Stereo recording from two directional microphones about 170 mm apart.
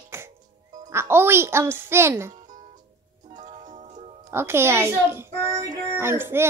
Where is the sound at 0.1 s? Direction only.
15° right (ahead or behind).